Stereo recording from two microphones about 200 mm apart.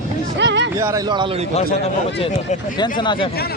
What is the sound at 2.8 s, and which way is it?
Speech, 25° left (ahead or behind).